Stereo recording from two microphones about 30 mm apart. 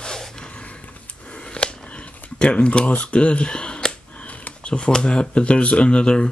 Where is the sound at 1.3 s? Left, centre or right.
Left.